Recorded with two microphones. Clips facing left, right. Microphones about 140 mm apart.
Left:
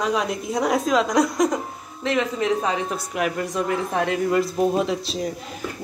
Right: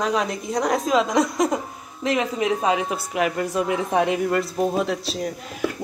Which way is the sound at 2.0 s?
15° right (ahead or behind).